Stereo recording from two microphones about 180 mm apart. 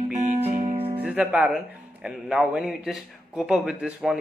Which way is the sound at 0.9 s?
10° right (ahead or behind).